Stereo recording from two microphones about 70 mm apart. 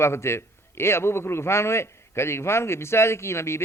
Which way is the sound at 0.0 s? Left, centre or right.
Left.